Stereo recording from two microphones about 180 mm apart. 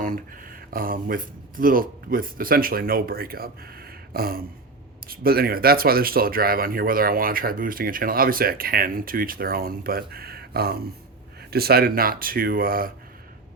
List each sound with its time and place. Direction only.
0.0 s speech: 50° right (ahead or behind)